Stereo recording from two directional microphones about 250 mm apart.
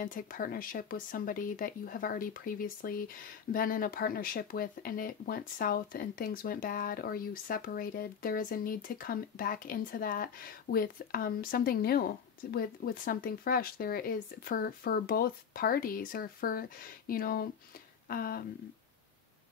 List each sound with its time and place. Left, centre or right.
0.0 s speech: left